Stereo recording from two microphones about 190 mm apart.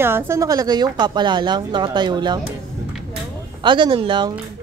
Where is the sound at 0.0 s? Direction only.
15° right (ahead or behind).